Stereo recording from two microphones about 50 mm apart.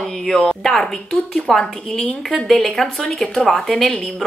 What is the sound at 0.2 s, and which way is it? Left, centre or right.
A woman's voice, centre.